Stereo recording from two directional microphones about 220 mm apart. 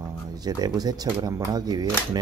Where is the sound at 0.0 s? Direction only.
15° right (ahead or behind).